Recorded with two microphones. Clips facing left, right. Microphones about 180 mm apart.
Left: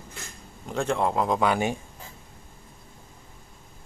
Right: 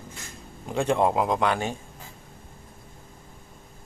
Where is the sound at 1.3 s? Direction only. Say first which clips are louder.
Left 1 dB; 5° left (ahead or behind).